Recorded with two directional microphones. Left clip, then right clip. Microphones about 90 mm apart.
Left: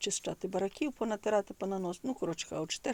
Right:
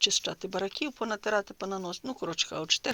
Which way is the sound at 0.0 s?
35° left (ahead or behind).